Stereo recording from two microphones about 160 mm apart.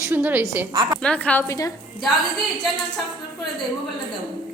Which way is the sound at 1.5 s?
20° left (ahead or behind).